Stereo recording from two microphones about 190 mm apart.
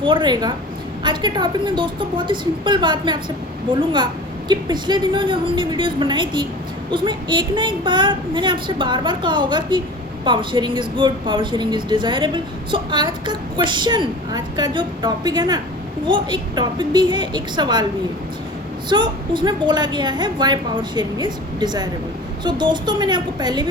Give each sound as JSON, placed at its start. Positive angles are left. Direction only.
{"t": 0.0, "sound": "a woman's voice", "side_deg": -25}
{"t": 18.9, "sound": "a woman's voice", "side_deg": -25}